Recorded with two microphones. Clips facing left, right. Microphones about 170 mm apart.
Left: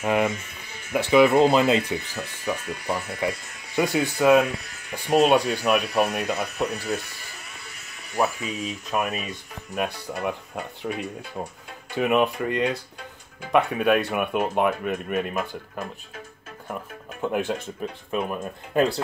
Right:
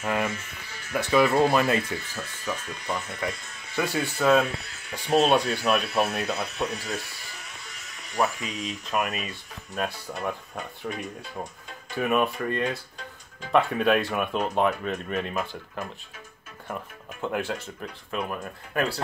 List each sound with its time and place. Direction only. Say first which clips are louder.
0.0 s speech: left 5 dB; 15° left (ahead or behind)
8.1 s speech: left 2 dB; 10° left (ahead or behind)
17.2 s speech: left 4 dB; 15° left (ahead or behind)